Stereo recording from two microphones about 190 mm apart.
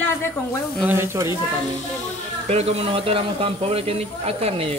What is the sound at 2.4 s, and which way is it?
A man's voice, 30° right (ahead or behind).